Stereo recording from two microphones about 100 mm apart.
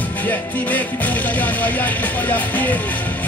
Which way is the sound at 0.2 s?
15° left (ahead or behind).